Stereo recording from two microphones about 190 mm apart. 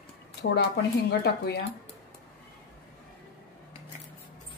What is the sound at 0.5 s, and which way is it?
Speech, 60° left (ahead or behind).